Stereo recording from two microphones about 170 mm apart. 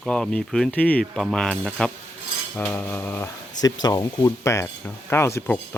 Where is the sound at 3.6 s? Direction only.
20° left (ahead or behind).